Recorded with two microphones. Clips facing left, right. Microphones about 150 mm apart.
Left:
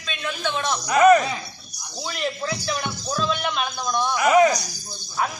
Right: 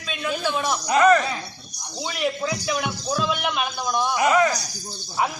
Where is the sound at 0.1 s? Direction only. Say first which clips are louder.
Right 2 dB; 5° right (ahead or behind).